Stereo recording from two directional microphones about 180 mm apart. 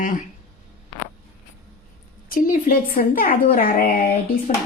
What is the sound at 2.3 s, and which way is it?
Speech, 50° left (ahead or behind).